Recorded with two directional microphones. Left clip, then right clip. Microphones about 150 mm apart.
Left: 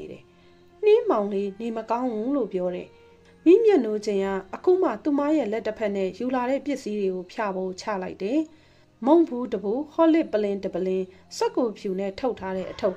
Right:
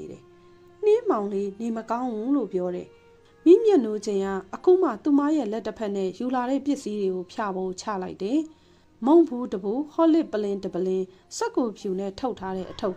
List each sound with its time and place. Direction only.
0.8 s speech: 40° right (ahead or behind)